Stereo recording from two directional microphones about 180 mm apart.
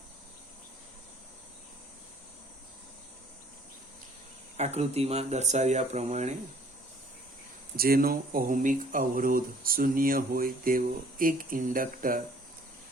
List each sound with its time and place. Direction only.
4.5 s speech: 40° right (ahead or behind)
7.8 s speech: 55° right (ahead or behind)